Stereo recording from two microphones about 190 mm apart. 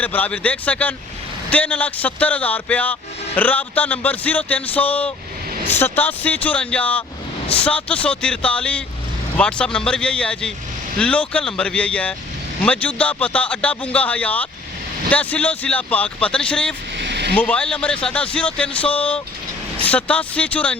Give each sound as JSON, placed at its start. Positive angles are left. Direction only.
{"t": 0.0, "sound": "speech", "side_deg": 10}
{"t": 17.0, "sound": "a sound", "side_deg": -60}
{"t": 17.3, "sound": "speech", "side_deg": 5}